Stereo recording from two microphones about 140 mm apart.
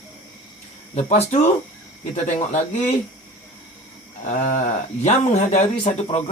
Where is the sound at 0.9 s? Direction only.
50° left (ahead or behind).